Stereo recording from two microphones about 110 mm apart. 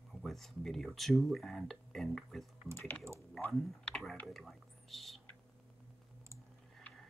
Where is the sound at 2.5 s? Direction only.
25° right (ahead or behind).